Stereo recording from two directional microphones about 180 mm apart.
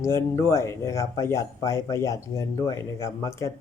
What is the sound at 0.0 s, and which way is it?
Speech, 15° left (ahead or behind).